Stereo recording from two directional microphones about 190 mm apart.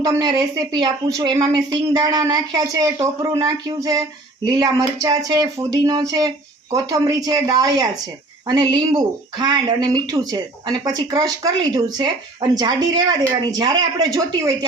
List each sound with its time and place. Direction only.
0.0 s speech: 20° right (ahead or behind)